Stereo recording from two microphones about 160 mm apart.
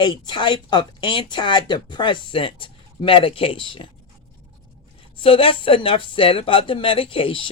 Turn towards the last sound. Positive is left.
turn(degrees=35)  # may be behind; listen again after turning